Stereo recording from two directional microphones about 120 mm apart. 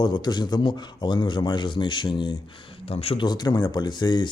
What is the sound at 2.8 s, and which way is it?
Speech, 55° left (ahead or behind).